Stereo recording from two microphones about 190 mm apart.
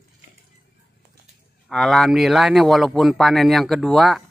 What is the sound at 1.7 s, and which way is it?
Speech, centre (ahead or behind).